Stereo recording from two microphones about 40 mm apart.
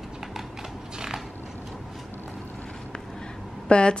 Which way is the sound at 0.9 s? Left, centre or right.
Centre.